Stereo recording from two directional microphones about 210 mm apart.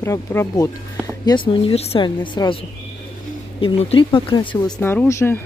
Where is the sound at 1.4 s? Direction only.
25° left (ahead or behind).